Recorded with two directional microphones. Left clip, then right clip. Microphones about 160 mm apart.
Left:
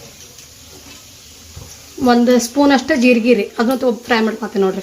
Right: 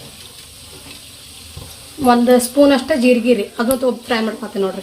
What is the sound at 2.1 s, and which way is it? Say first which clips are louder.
A woman's voice: right 1 dB; 70° left (ahead or behind).